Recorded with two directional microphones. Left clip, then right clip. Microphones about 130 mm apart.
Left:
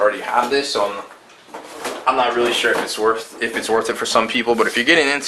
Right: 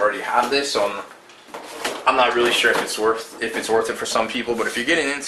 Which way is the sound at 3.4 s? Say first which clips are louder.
Left 1 dB; 15° left (ahead or behind).